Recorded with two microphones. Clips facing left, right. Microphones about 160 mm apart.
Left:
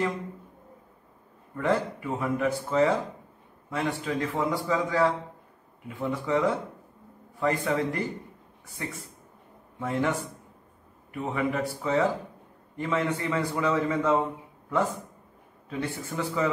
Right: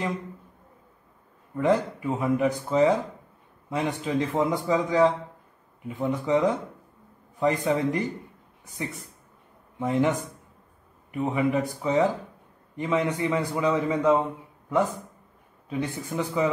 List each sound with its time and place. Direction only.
1.6 s a man's voice: 20° right (ahead or behind)
11.2 s a man's voice: 20° right (ahead or behind)
15.7 s a man's voice: 15° right (ahead or behind)